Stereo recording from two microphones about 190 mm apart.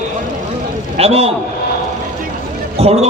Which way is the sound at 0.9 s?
30° right (ahead or behind).